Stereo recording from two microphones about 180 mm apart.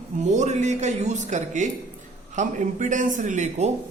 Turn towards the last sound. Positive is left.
turn(degrees=-40)  # may be behind; listen again after turning